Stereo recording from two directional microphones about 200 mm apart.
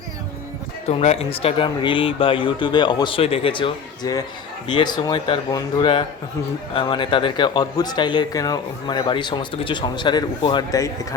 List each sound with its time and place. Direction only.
0.9 s speech: 30° left (ahead or behind); by 10.9 s 15° left (ahead or behind)